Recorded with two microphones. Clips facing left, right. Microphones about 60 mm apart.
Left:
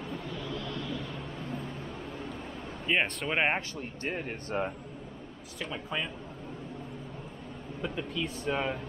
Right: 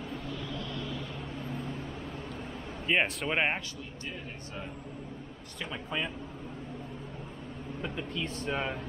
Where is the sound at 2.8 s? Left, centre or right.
Centre.